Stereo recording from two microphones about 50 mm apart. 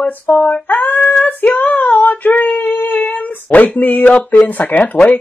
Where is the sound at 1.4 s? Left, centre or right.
Left.